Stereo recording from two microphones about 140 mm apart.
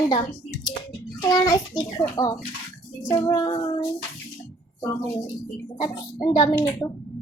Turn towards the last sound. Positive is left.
turn(degrees=25)  # may be behind; listen again after turning